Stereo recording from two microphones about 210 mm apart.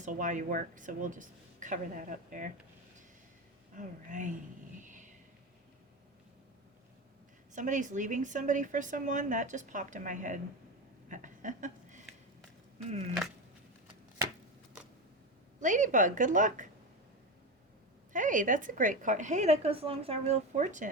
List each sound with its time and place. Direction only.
0.0 s a woman's voice: 40° right (ahead or behind)
3.8 s a woman's voice: 35° right (ahead or behind)
4.8 s a sound: 35° right (ahead or behind)
7.5 s a woman's voice: 35° right (ahead or behind)
11.1 s a sound: 40° right (ahead or behind)
15.6 s a woman's voice: 35° right (ahead or behind)
18.1 s a woman's voice: 40° right (ahead or behind)